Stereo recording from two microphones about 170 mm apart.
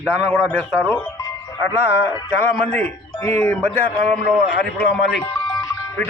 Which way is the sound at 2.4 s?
10° left (ahead or behind).